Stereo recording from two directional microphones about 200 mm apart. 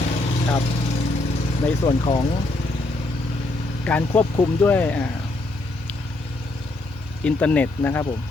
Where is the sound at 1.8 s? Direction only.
25° left (ahead or behind).